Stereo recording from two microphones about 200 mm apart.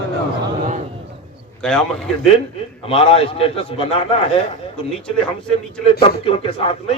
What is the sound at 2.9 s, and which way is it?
Speech, 30° left (ahead or behind).